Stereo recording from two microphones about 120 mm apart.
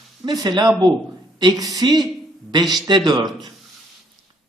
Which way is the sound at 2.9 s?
35° right (ahead or behind).